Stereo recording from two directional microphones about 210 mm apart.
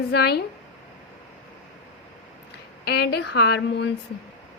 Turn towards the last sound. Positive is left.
turn(degrees=50)  # may be behind; listen again after turning